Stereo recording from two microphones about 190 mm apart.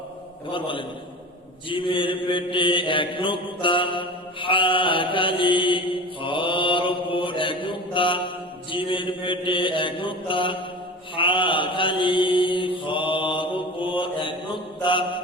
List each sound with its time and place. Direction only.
0.5 s mantra: 25° left (ahead or behind)